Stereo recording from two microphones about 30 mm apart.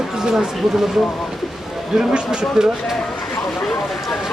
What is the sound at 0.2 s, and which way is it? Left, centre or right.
Speech, right.